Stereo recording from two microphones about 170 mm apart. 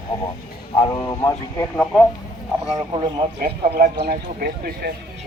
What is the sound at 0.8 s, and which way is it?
Speech, 20° left (ahead or behind).